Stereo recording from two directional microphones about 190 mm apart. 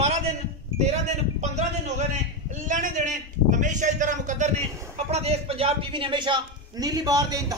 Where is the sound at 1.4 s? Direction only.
35° right (ahead or behind).